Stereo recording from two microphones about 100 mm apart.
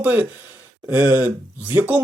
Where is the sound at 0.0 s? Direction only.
15° right (ahead or behind).